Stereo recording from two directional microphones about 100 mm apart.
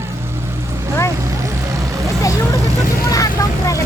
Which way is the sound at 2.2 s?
30° left (ahead or behind).